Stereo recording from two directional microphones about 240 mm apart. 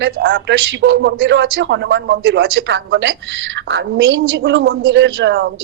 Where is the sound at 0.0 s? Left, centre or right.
Right.